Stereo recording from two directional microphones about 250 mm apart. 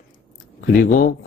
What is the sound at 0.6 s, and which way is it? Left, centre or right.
Speech, left.